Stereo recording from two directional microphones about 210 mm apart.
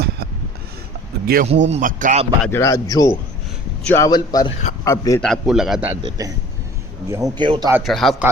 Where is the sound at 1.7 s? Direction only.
40° right (ahead or behind).